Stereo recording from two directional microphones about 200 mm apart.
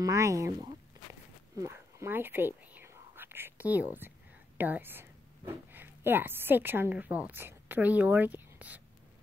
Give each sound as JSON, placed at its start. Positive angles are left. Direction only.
{"t": 0.0, "sound": "speech", "side_deg": -15}
{"t": 1.6, "sound": "whispering", "side_deg": -15}
{"t": 4.6, "sound": "speech", "side_deg": -10}